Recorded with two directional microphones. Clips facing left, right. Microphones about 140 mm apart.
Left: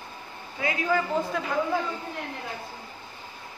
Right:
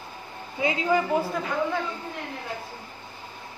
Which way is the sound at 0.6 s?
20° right (ahead or behind).